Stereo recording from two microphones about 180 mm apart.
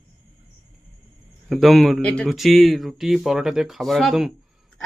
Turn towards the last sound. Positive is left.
turn(degrees=0)  # may be behind; listen again after turning